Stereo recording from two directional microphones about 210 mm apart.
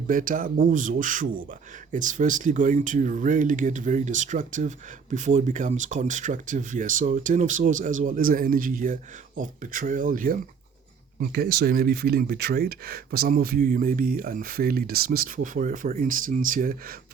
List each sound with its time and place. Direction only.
0.1 s speech: 40° right (ahead or behind)